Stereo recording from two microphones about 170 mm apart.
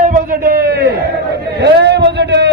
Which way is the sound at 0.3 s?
60° right (ahead or behind).